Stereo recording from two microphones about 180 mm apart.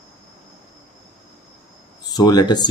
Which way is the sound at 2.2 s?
20° left (ahead or behind).